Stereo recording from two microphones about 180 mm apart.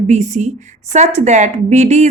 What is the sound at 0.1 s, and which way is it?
A woman's voice, 40° right (ahead or behind).